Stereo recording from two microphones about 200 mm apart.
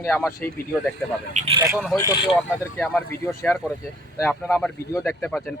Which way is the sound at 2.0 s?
20° left (ahead or behind).